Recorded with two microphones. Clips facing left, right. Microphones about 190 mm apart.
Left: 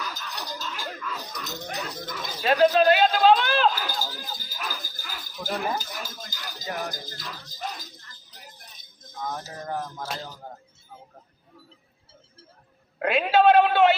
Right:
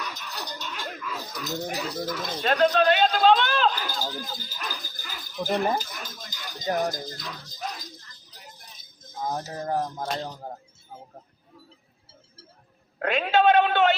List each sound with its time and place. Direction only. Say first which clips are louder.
0.0 s a sound: even; centre (ahead or behind)
1.4 s speech: right 7 dB; centre (ahead or behind)
9.2 s speech: right 3 dB; 30° right (ahead or behind)
13.0 s speech: left 2 dB; 5° left (ahead or behind)